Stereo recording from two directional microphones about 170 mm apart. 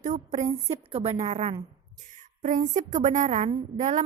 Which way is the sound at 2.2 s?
45° right (ahead or behind).